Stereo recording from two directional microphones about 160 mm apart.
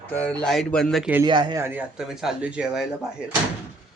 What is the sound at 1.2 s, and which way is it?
Speech, 30° right (ahead or behind).